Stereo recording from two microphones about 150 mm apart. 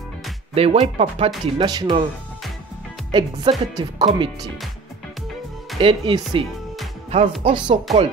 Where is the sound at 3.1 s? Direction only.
30° right (ahead or behind).